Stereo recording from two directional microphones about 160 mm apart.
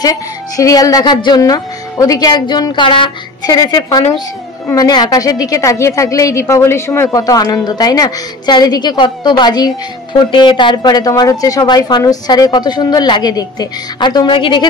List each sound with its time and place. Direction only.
0.0 s a woman's voice: 20° left (ahead or behind)